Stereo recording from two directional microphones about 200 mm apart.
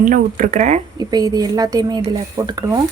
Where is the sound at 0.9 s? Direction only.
20° right (ahead or behind).